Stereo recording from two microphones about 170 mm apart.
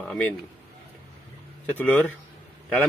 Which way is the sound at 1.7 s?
10° left (ahead or behind).